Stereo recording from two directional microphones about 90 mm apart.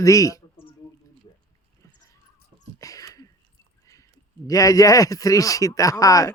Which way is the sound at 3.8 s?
40° left (ahead or behind).